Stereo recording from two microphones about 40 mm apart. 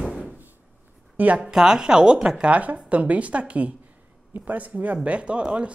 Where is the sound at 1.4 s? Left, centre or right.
Centre.